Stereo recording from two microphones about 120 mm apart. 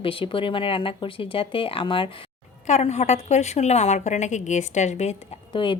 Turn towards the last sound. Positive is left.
turn(degrees=45)  # may be behind; listen again after turning